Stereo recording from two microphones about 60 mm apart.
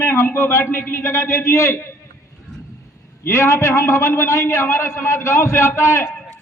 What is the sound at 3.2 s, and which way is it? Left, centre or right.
A man's voice, left.